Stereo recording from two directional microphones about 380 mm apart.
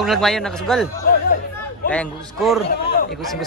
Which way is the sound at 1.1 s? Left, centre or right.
Left.